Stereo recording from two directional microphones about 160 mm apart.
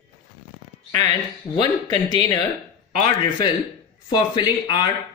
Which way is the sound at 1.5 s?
25° left (ahead or behind).